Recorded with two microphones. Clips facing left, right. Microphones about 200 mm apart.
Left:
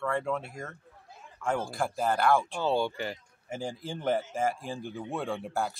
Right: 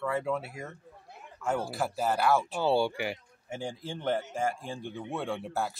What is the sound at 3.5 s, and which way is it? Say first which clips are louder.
Speech: left 1 dB; centre (ahead or behind).